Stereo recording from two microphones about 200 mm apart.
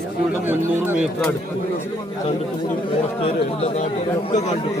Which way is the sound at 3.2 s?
30° left (ahead or behind).